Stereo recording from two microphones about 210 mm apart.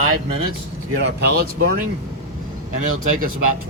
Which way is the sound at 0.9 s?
55° right (ahead or behind).